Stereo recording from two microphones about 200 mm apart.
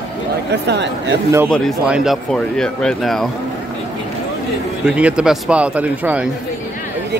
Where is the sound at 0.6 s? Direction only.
60° right (ahead or behind).